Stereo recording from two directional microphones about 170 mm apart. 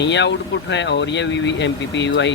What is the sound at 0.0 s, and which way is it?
Speech, 90° left.